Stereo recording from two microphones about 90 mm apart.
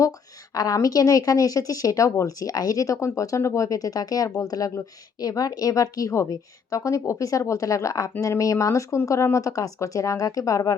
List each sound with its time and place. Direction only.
0.5 s speech: 40° left (ahead or behind)